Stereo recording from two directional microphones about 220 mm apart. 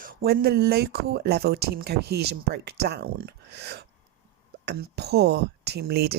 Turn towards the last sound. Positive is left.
turn(degrees=-45)  # may be behind; listen again after turning